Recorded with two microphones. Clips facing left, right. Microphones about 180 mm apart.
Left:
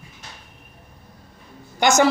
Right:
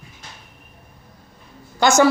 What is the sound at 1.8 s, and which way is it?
Speech, 20° left (ahead or behind).